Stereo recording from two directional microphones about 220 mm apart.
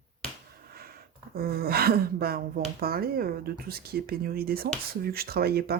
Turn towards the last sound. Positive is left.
turn(degrees=-45)  # may be behind; listen again after turning